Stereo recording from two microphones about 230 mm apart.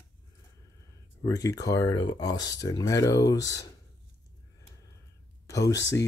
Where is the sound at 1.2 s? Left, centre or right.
Centre.